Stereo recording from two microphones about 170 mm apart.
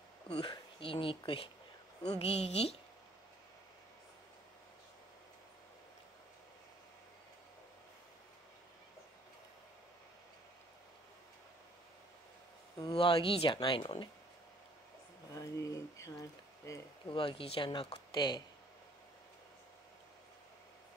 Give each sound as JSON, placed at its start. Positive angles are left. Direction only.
{"t": 0.3, "sound": "speech", "side_deg": 30}
{"t": 12.7, "sound": "speech", "side_deg": 25}
{"t": 15.3, "sound": "a sound", "side_deg": 20}
{"t": 17.2, "sound": "speech", "side_deg": 30}